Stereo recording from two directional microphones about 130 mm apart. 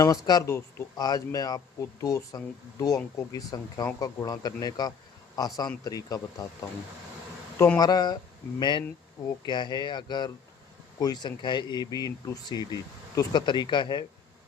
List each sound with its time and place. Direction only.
0.0 s speech: 30° left (ahead or behind)
7.8 s speech: 30° left (ahead or behind)